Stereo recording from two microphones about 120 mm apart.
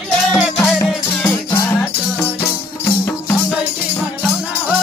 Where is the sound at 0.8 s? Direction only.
20° left (ahead or behind).